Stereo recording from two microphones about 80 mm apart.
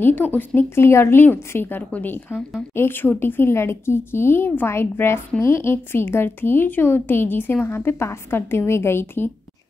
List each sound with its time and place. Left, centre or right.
0.0 s a woman's voice: left